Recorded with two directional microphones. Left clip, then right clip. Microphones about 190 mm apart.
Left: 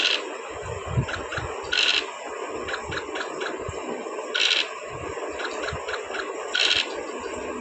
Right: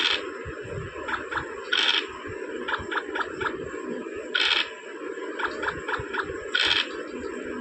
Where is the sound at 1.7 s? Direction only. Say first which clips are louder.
Left 1 dB; 35° right (ahead or behind).